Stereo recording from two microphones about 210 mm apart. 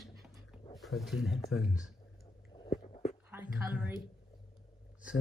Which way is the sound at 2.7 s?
30° left (ahead or behind).